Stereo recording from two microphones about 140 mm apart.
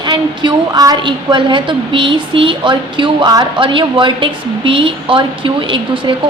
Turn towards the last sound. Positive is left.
turn(degrees=-35)  # may be behind; listen again after turning